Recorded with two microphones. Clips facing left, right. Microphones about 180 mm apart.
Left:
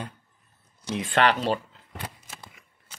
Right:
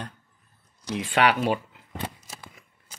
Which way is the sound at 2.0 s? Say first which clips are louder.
Right 2 dB; 25° right (ahead or behind).